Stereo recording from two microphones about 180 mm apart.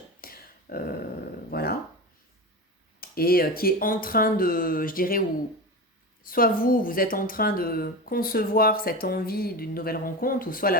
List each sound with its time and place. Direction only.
0.2 s a sound: 55° left (ahead or behind)
1.5 s dog: 60° left (ahead or behind)
3.0 s speech: 55° left (ahead or behind)
6.2 s speech: 55° left (ahead or behind)